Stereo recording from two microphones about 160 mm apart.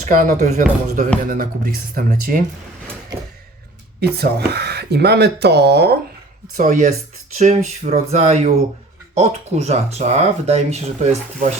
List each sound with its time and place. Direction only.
0.1 s speech: 50° right (ahead or behind)
1.3 s speech: 65° right (ahead or behind)
4.0 s speech: 90° right
6.6 s speech: 50° right (ahead or behind)